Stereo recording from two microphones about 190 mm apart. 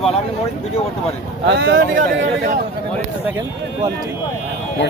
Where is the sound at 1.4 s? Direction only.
65° right (ahead or behind).